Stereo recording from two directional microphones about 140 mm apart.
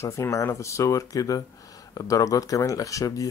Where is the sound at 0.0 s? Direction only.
20° left (ahead or behind).